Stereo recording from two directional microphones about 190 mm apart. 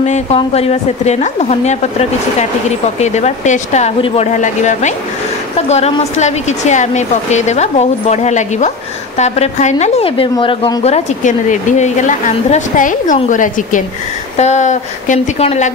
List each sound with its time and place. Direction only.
0.0 s a woman's voice: 35° left (ahead or behind)